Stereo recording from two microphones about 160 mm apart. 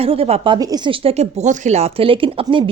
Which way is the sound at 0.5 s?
25° right (ahead or behind).